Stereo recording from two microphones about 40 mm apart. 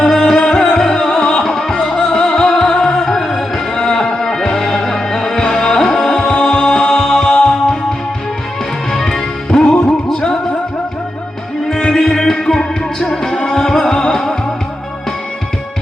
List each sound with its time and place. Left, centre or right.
0.0 s music: centre
3.8 s music: centre
9.0 s music: centre
11.7 s music: centre